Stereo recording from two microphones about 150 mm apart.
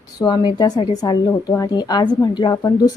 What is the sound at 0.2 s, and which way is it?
A woman's voice, 25° left (ahead or behind).